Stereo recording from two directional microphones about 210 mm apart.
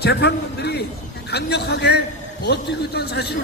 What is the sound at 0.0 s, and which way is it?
A man's voice, 55° left (ahead or behind).